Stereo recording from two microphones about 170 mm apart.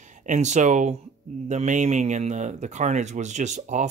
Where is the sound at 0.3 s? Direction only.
45° right (ahead or behind).